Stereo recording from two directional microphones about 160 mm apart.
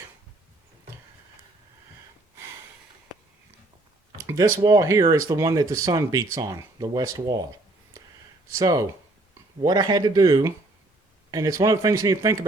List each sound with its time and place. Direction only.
4.3 s speech: 20° right (ahead or behind)
8.4 s speech: 20° right (ahead or behind)